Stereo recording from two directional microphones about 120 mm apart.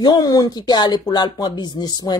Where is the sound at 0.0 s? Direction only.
35° left (ahead or behind).